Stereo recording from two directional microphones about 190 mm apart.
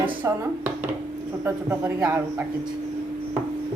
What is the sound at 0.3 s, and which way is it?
Speech, 15° right (ahead or behind).